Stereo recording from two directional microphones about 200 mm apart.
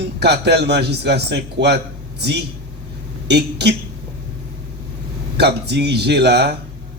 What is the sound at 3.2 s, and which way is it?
Speech, 55° right (ahead or behind).